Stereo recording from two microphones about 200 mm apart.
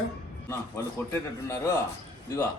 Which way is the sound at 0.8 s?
15° left (ahead or behind).